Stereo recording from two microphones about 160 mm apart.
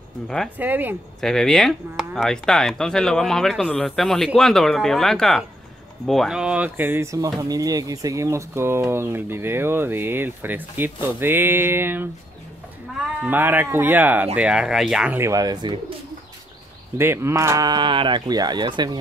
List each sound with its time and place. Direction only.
0.6 s speech: 10° right (ahead or behind)
1.2 s speech: 5° left (ahead or behind); by 12.1 s 15° right (ahead or behind)
13.2 s speech: 10° right (ahead or behind)
15.1 s speech: 20° right (ahead or behind)
17.0 s speech: 15° right (ahead or behind)